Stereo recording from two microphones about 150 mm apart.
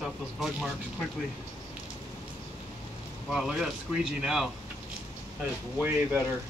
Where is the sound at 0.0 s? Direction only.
Centre (ahead or behind).